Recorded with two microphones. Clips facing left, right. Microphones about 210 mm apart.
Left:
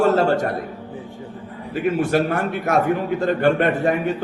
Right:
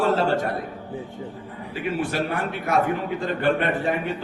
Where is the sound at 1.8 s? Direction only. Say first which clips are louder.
Left 6 dB; 45° left (ahead or behind).